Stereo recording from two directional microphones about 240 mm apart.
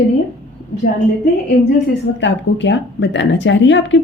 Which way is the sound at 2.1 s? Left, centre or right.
Left.